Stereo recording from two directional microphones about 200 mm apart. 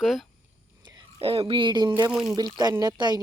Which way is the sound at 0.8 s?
20° right (ahead or behind).